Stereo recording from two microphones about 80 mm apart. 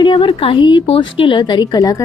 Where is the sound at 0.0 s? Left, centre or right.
Left.